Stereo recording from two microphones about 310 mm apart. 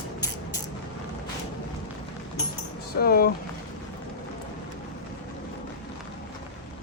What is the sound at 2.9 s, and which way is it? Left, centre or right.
Speech, left.